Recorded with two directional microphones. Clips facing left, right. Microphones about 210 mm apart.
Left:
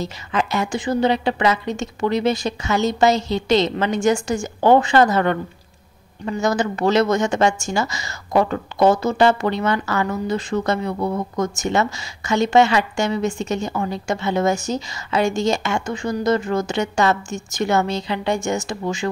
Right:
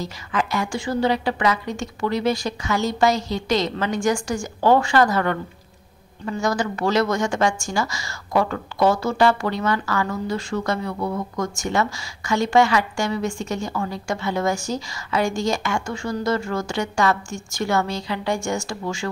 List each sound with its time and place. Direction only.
0.0 s speech: 25° left (ahead or behind)